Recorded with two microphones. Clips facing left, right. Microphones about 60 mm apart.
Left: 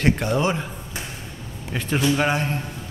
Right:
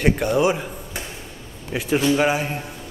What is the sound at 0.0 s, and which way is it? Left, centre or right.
Speech, centre.